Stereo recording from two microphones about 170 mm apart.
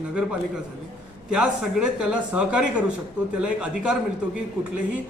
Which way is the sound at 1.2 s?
5° right (ahead or behind).